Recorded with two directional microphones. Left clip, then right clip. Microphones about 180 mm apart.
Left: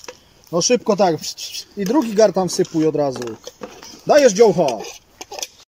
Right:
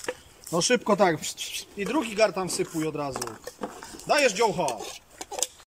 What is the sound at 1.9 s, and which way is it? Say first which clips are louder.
Speech: left 9 dB; 40° left (ahead or behind).